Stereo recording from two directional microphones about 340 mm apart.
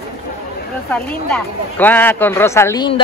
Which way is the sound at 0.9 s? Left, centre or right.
Centre.